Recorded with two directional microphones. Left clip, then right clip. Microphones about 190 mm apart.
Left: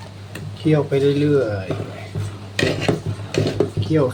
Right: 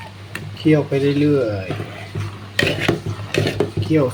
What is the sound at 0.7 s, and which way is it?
Speech, 15° right (ahead or behind).